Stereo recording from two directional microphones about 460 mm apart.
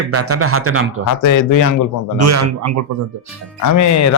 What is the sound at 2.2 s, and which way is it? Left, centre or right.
Speech, right.